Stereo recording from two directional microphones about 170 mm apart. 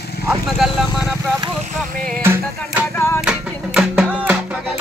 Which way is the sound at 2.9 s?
15° left (ahead or behind).